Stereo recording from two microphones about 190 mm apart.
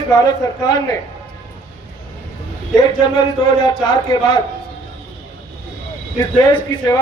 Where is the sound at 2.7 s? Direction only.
20° left (ahead or behind).